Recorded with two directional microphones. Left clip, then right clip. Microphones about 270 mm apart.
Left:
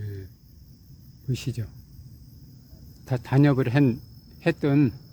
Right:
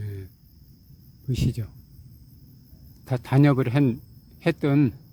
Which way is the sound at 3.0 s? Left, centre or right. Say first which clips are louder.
Right 1 dB; centre.